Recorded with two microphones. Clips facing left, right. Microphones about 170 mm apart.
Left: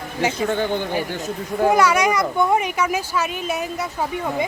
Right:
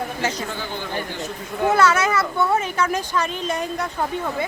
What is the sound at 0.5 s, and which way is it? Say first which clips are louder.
Speech: left 8 dB; 55° left (ahead or behind).